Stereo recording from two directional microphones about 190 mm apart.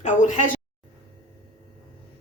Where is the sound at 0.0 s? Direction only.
40° left (ahead or behind).